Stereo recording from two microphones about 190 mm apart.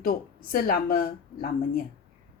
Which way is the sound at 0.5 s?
50° left (ahead or behind).